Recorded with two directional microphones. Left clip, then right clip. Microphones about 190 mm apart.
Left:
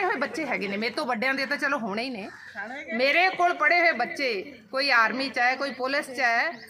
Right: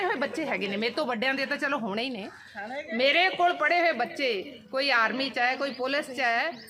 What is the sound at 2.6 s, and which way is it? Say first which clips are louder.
Speech: left 1 dB; 55° right (ahead or behind).